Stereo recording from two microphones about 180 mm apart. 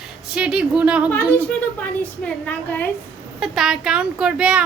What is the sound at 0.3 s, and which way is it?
Speech, 5° right (ahead or behind).